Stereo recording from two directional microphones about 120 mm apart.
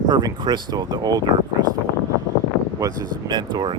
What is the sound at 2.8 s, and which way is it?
Speech, 35° right (ahead or behind).